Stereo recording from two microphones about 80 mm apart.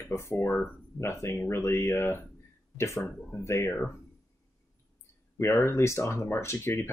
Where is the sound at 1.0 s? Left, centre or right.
Left.